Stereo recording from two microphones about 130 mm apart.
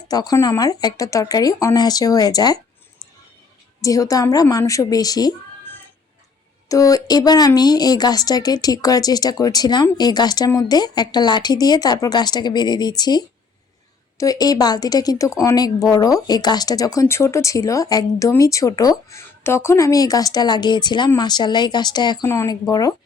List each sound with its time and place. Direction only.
0.1 s speech: 30° left (ahead or behind)
3.8 s speech: 25° left (ahead or behind)
6.7 s speech: 25° left (ahead or behind)